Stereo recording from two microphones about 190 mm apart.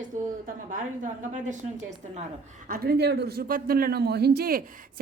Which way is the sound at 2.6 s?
50° right (ahead or behind).